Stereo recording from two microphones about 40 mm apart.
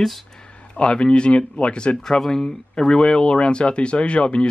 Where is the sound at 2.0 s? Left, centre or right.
Centre; by 4.4 s left.